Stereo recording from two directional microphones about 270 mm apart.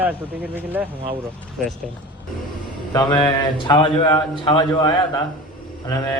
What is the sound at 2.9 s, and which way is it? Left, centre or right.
Speech, centre.